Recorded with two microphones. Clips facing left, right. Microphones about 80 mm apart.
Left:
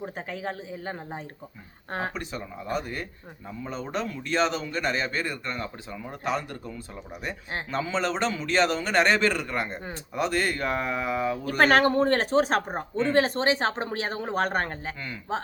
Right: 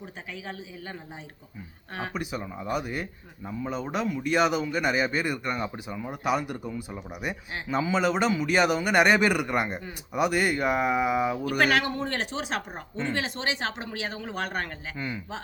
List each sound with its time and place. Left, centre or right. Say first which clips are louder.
0.0 s a woman's voice: left 6 dB; left
2.1 s speech: right 2 dB; centre
11.4 s a woman's voice: left 8 dB; left
14.9 s speech: right 4 dB; centre